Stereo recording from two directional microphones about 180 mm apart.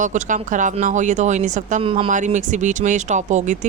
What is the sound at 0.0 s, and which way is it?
Speech, 45° right (ahead or behind).